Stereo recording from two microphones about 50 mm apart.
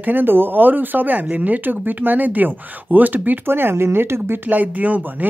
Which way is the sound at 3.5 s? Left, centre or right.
Right.